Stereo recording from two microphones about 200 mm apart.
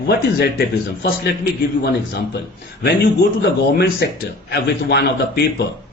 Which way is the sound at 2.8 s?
50° left (ahead or behind).